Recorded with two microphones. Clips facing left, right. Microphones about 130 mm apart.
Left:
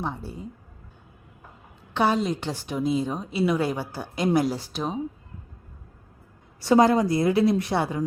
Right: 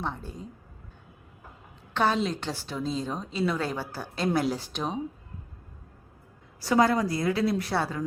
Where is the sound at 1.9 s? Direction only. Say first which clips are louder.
Left 3 dB; 15° left (ahead or behind).